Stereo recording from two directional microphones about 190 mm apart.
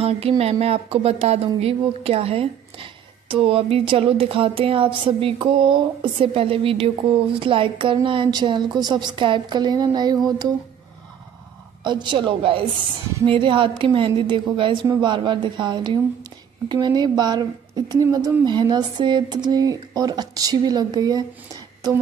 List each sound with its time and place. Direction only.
0.0 s speech: 30° right (ahead or behind)
11.8 s speech: 25° right (ahead or behind)